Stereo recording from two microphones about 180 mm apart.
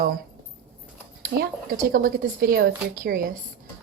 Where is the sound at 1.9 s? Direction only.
55° right (ahead or behind).